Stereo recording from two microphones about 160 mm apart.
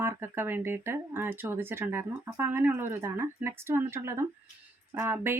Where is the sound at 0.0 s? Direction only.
15° right (ahead or behind).